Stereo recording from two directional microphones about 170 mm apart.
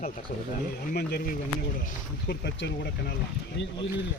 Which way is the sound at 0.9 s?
65° left (ahead or behind).